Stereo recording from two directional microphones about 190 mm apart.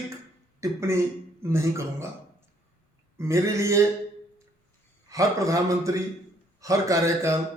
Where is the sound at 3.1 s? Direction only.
15° right (ahead or behind).